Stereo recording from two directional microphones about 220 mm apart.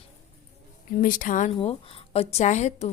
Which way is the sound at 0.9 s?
40° left (ahead or behind).